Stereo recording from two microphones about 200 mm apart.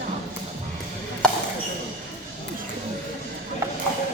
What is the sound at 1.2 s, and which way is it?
Basketball bounce, 5° left (ahead or behind).